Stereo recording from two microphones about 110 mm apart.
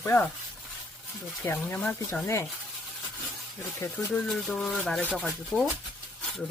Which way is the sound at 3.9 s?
5° left (ahead or behind).